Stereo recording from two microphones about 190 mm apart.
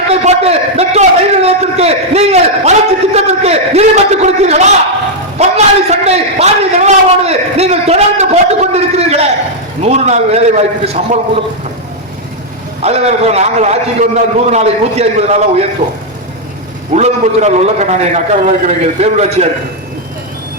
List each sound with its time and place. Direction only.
0.1 s a man's voice: 35° right (ahead or behind)
12.8 s a man's voice: 35° right (ahead or behind)
16.9 s a man's voice: 35° right (ahead or behind)